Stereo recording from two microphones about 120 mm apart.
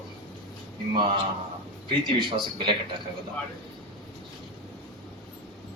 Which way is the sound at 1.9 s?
40° right (ahead or behind).